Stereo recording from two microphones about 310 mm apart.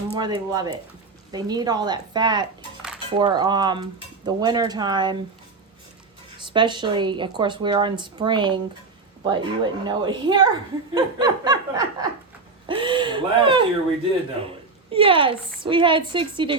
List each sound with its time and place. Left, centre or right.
0.2 s speech: centre
6.4 s speech: centre
14.8 s speech: centre